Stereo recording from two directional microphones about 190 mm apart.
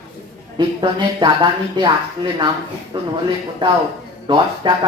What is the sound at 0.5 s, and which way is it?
Speech, 25° right (ahead or behind).